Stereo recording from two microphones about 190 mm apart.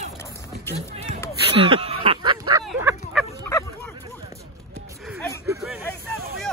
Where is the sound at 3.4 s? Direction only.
15° left (ahead or behind).